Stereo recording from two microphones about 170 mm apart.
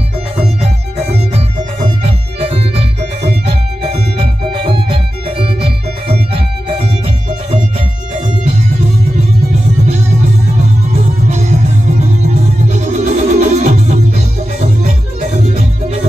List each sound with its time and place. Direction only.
2.0 s music: 35° right (ahead or behind)
11.2 s music: 45° right (ahead or behind)
12.6 s music: 45° right (ahead or behind)